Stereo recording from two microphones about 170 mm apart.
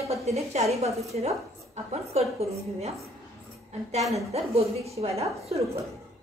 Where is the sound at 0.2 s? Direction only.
40° right (ahead or behind).